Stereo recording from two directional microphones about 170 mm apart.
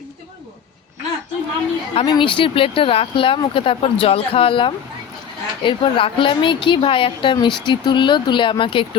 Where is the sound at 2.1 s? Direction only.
30° left (ahead or behind).